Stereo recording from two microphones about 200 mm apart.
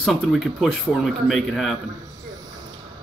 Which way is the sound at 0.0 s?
Centre (ahead or behind).